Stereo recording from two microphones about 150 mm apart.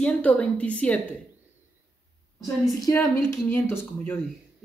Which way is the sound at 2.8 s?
20° left (ahead or behind).